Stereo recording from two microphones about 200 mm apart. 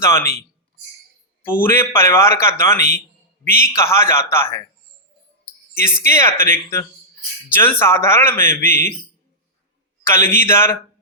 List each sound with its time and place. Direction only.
0.0 s a man's voice: 15° left (ahead or behind)
1.5 s a man's voice: 10° left (ahead or behind)
5.7 s a man's voice: 15° left (ahead or behind)
10.0 s a man's voice: 15° left (ahead or behind)